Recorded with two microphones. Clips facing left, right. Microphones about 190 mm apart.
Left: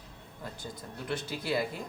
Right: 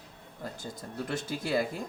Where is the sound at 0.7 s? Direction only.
45° right (ahead or behind).